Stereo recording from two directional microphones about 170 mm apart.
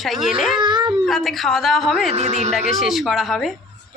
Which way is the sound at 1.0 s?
Centre (ahead or behind).